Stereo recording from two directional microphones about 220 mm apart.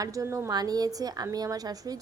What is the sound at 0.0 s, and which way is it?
A woman's voice, 15° right (ahead or behind).